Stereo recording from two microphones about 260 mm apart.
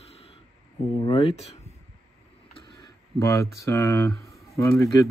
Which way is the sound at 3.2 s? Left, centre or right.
Centre.